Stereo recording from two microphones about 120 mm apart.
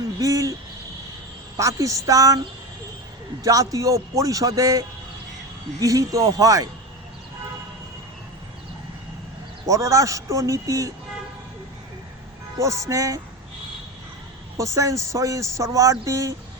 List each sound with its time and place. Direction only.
0.2 s a sound: 30° right (ahead or behind)
1.5 s a man's voice: 25° right (ahead or behind)
3.4 s a man's voice: 30° right (ahead or behind)
5.8 s a man's voice: 30° right (ahead or behind)
9.6 s a man's voice: 25° right (ahead or behind)
12.5 s a man's voice: 25° right (ahead or behind)
14.6 s a man's voice: 25° right (ahead or behind)